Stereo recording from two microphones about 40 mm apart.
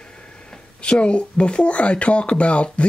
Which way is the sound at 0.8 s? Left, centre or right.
Left.